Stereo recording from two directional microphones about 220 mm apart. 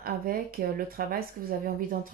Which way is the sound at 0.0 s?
40° right (ahead or behind).